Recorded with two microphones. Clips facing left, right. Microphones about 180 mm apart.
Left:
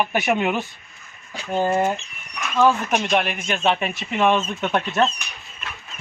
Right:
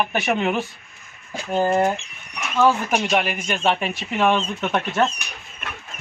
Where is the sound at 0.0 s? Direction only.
5° left (ahead or behind).